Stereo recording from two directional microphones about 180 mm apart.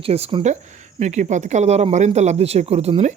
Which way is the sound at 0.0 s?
35° right (ahead or behind).